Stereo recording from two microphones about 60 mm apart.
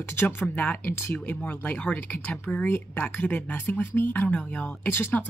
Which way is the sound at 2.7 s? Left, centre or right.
Left.